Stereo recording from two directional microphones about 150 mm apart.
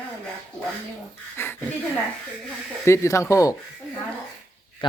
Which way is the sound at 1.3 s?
15° left (ahead or behind).